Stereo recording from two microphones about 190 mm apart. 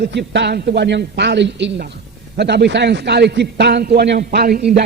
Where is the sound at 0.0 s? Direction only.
65° right (ahead or behind).